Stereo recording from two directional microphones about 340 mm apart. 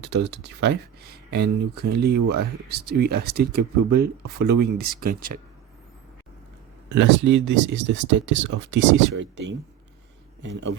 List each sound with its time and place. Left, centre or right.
0.0 s speech: right
6.9 s speech: right